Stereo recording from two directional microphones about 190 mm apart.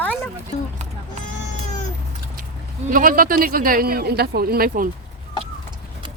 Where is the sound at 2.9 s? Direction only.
45° right (ahead or behind).